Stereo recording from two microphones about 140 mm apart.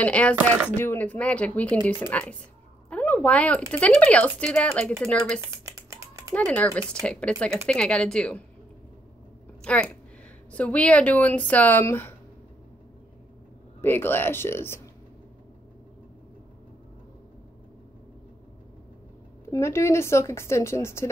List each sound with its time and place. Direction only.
0.0 s speech: 10° left (ahead or behind)
2.9 s a sound: 10° left (ahead or behind)
3.9 s speech: 10° left (ahead or behind)
5.4 s typing: 20° right (ahead or behind)
6.3 s speech: 10° left (ahead or behind)
9.6 s a sound: 5° left (ahead or behind)
10.5 s speech: 10° left (ahead or behind)
13.7 s speech: 15° left (ahead or behind)
19.5 s speech: 20° left (ahead or behind)